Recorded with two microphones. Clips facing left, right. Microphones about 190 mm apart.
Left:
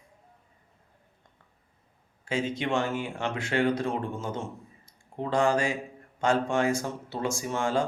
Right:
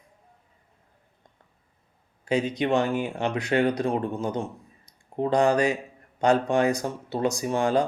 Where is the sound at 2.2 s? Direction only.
15° right (ahead or behind).